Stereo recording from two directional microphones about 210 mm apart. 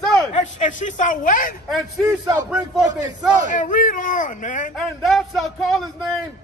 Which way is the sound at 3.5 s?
40° left (ahead or behind).